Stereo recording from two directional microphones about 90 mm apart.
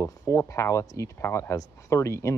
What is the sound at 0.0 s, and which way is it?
Speech, 35° left (ahead or behind).